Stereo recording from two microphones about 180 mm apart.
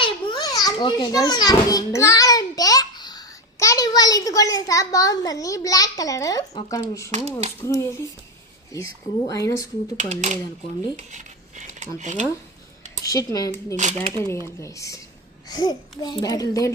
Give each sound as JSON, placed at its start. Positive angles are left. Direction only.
{"t": 0.0, "sound": "children playing", "side_deg": 25}
{"t": 7.6, "sound": "a child's voice", "side_deg": 20}
{"t": 10.0, "sound": "speech", "side_deg": -40}
{"t": 10.9, "sound": "a sound", "side_deg": -40}
{"t": 11.9, "sound": "speech", "side_deg": -40}
{"t": 13.1, "sound": "a child's voice", "side_deg": 20}
{"t": 13.7, "sound": "speech", "side_deg": -40}
{"t": 14.2, "sound": "a child's voice", "side_deg": 15}